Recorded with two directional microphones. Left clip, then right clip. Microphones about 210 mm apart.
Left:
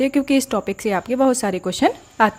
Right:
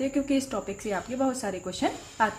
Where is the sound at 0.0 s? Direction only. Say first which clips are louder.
Left 9 dB; 45° left (ahead or behind).